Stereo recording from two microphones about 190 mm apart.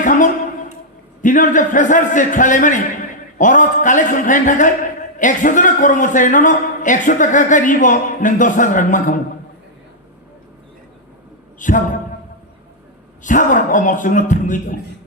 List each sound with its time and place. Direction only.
0.0 s a man's voice: 45° left (ahead or behind)
11.6 s a man's voice: 40° left (ahead or behind)
13.2 s a man's voice: 45° left (ahead or behind)